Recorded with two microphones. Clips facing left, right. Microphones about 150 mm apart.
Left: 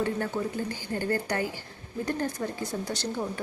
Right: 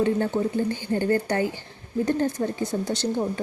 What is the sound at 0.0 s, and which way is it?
Speech, 25° right (ahead or behind).